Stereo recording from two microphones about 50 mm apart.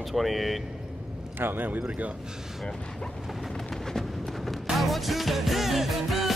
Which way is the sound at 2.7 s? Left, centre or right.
Centre.